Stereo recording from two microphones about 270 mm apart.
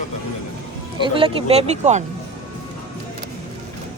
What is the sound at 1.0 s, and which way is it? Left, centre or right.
Speech, centre.